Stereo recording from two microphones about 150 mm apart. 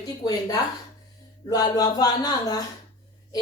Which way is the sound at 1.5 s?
25° left (ahead or behind).